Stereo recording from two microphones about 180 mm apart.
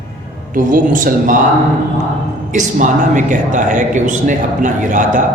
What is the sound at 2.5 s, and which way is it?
A man's voice, 45° right (ahead or behind).